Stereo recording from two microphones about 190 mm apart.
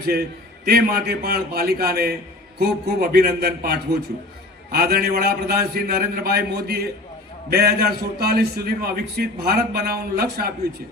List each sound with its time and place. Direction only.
0.0 s a man's voice: 55° right (ahead or behind)